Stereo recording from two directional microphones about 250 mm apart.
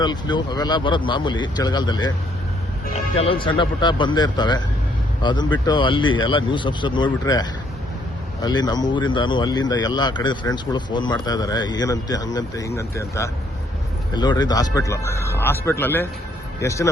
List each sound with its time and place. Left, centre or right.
0.0 s speech: centre
3.2 s speech: left